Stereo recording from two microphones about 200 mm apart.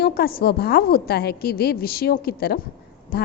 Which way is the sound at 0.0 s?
50° left (ahead or behind).